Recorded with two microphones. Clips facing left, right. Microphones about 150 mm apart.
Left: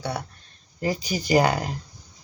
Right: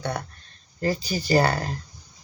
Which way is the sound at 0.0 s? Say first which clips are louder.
Right 1 dB; 10° left (ahead or behind).